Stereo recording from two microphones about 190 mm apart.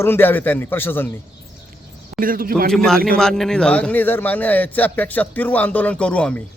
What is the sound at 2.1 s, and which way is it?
Speech, 50° right (ahead or behind).